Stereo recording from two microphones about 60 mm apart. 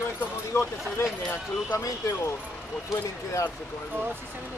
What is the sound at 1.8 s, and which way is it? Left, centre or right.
Speech, left.